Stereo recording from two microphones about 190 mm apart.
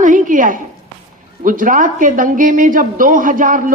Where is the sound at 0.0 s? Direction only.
45° right (ahead or behind).